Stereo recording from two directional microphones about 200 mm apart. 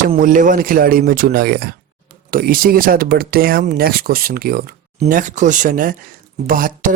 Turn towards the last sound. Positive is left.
turn(degrees=-45)  # may be behind; listen again after turning